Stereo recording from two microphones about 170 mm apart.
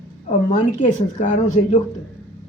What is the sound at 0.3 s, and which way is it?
Speech, 45° left (ahead or behind).